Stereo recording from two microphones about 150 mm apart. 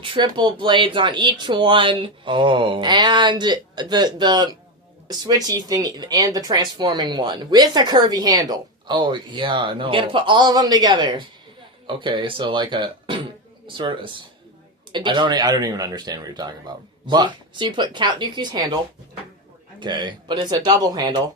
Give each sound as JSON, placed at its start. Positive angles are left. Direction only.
{"t": 0.0, "sound": "speech", "side_deg": -35}
{"t": 19.8, "sound": "speech", "side_deg": -30}